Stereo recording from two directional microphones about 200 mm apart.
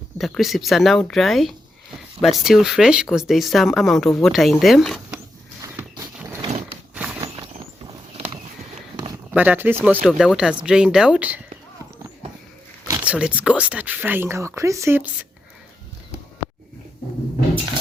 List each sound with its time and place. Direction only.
0.2 s speech: centre (ahead or behind)
5.6 s a sound: 15° right (ahead or behind)
6.9 s horse: 5° right (ahead or behind)
9.3 s speech: 5° right (ahead or behind)
12.9 s speech: 5° right (ahead or behind)